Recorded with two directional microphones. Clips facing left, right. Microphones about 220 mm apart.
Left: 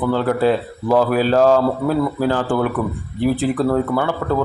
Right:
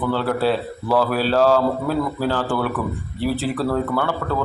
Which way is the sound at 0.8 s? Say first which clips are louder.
Left 4 dB; 15° left (ahead or behind).